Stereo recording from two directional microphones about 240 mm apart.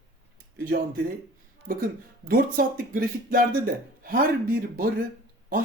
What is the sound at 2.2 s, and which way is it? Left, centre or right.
A man's voice, right.